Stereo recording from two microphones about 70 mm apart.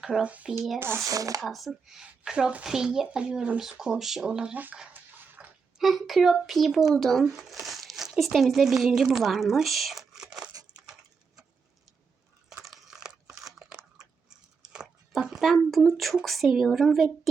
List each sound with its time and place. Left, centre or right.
0.0 s speech: centre
0.3 s speech: centre
0.8 s speech: right
1.0 s speech: right
1.4 s speech: centre
5.4 s a sound: centre
5.8 s a child's voice: centre
7.6 s crumpling: centre
8.2 s a woman's voice: centre
12.6 s a sound: centre
16.0 s a child's voice: centre